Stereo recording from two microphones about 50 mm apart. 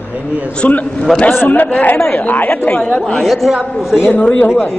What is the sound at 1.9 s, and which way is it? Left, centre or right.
Speech, left.